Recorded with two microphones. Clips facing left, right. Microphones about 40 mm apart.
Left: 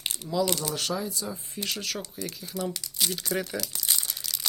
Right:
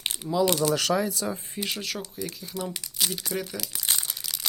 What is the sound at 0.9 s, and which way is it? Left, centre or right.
Speech, right.